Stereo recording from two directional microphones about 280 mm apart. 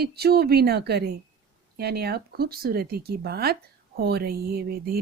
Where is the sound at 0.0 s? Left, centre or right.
Right.